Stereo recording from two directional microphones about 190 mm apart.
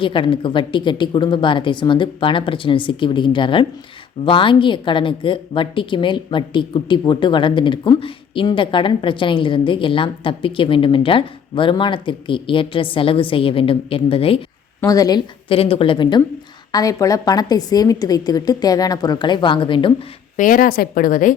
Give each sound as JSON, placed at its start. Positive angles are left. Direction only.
{"t": 0.0, "sound": "a woman's voice", "side_deg": 25}
{"t": 14.8, "sound": "a woman's voice", "side_deg": 20}
{"t": 20.3, "sound": "a woman's voice", "side_deg": 45}